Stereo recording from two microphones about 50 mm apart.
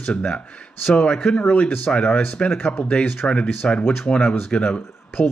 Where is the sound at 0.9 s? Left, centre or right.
Centre.